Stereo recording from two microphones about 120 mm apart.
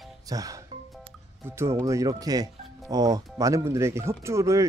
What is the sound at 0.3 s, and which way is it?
Speech, 30° right (ahead or behind).